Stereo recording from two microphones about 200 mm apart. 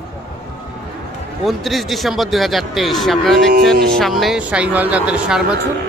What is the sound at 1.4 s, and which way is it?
A man's voice, centre (ahead or behind).